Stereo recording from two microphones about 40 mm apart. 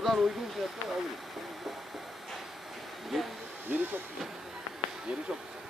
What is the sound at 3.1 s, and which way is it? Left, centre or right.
Speech, centre.